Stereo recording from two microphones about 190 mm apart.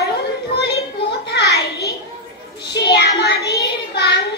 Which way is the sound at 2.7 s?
60° left (ahead or behind).